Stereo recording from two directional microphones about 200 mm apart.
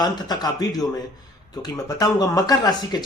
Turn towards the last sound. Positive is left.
turn(degrees=20)  # may be behind; listen again after turning